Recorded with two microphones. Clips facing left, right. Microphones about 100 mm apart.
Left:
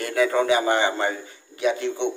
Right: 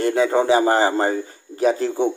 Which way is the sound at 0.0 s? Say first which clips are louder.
Right 3 dB; 30° right (ahead or behind).